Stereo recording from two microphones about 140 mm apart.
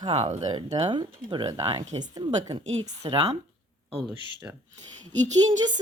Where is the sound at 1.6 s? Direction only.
40° right (ahead or behind).